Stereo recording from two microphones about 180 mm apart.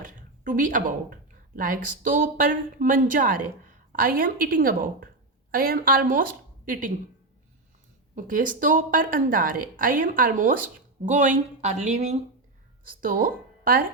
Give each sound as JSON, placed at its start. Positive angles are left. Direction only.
{"t": 0.0, "sound": "a woman's voice", "side_deg": -45}
{"t": 8.1, "sound": "speech", "side_deg": -50}
{"t": 12.8, "sound": "speech", "side_deg": -50}